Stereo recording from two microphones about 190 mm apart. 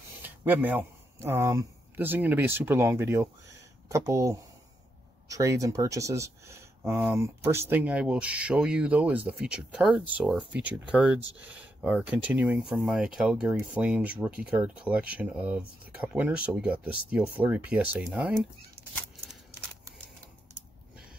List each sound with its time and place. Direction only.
0.2 s speech: 10° right (ahead or behind)